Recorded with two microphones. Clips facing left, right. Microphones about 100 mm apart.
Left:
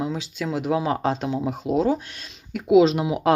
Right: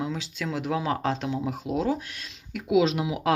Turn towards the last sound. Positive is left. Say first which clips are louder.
# left 5 dB
turn(degrees=35)  # may be behind; listen again after turning